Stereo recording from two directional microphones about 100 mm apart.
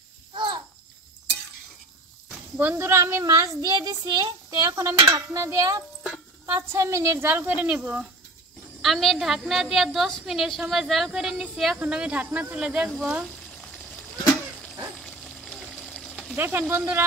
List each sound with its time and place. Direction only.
0.3 s babbling: 50° right (ahead or behind)
2.5 s speech: 25° right (ahead or behind)
3.7 s dishes: 40° right (ahead or behind)
6.4 s speech: 30° right (ahead or behind); by 8.1 s 10° right (ahead or behind)
8.8 s a woman's voice: centre (ahead or behind)
11.8 s speech: 15° right (ahead or behind)
15.0 s a sound: 5° left (ahead or behind)
16.3 s speech: 20° right (ahead or behind)